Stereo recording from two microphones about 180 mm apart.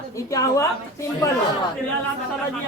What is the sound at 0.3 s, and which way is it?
Speech, 20° left (ahead or behind).